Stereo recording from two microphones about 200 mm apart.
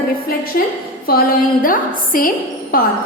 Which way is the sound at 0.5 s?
50° left (ahead or behind).